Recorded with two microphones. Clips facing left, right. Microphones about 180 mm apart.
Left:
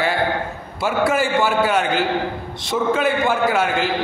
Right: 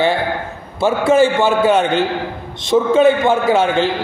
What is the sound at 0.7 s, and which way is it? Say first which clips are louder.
A man's voice: right 6 dB; 25° right (ahead or behind).